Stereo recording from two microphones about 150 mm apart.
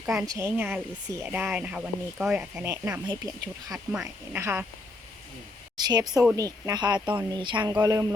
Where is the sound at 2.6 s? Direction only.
15° right (ahead or behind).